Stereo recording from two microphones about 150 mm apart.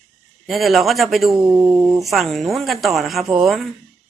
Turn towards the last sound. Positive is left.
turn(degrees=0)  # may be behind; listen again after turning